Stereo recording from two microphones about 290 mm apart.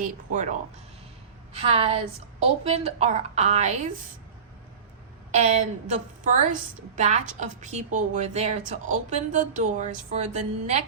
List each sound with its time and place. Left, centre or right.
0.0 s a woman's voice: right
1.5 s a woman's voice: centre
5.3 s a woman's voice: right